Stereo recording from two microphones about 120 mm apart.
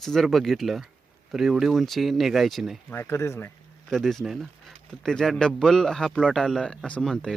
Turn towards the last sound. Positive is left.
turn(degrees=5)  # may be behind; listen again after turning